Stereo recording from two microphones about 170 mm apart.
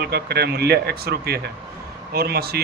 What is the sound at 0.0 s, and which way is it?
A man's voice, 65° right (ahead or behind).